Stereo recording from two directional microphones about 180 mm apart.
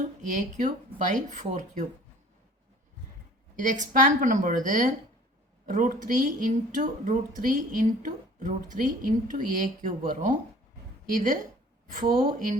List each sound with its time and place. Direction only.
0.2 s speech: 45° right (ahead or behind)
3.5 s speech: 45° right (ahead or behind)